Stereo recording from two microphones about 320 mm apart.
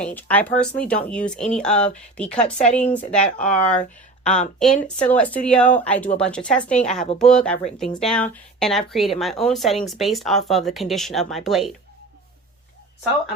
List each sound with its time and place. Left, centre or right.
0.0 s speech: centre
2.6 s speech: left
2.9 s speech: centre
6.7 s speech: left
7.2 s speech: centre